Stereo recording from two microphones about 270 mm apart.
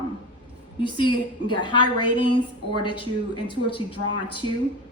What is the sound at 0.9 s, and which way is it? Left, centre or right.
A woman's voice, centre.